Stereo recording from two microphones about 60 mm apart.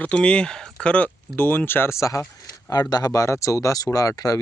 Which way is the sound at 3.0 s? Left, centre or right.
Left.